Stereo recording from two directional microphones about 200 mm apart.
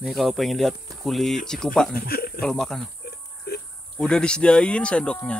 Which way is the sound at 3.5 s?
50° left (ahead or behind).